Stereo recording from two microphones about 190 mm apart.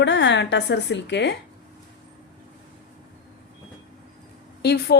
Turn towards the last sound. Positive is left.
turn(degrees=60)  # may be behind; listen again after turning